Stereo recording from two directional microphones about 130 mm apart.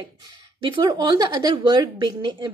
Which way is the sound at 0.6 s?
40° right (ahead or behind).